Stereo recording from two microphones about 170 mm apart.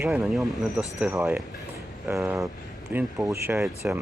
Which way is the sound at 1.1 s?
10° right (ahead or behind).